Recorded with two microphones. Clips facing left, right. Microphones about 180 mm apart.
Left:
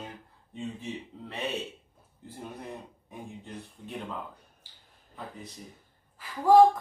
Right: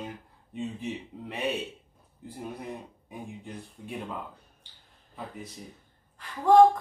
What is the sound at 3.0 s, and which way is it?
Speech, 10° right (ahead or behind).